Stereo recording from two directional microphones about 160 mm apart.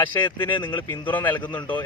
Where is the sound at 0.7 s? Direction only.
10° left (ahead or behind).